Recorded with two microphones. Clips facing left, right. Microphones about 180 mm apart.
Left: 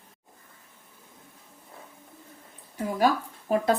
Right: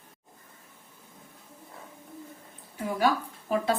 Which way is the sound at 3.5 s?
40° left (ahead or behind).